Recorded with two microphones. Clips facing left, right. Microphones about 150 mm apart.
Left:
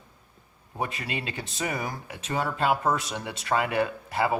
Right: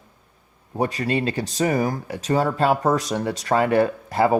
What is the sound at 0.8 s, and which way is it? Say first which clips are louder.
Speech: right 9 dB; 40° right (ahead or behind).